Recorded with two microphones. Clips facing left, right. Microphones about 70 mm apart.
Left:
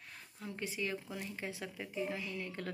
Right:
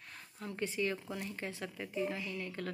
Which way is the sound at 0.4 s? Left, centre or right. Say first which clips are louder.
Right 4 dB; centre.